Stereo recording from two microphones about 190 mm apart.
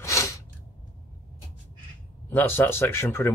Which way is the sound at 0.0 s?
15° left (ahead or behind).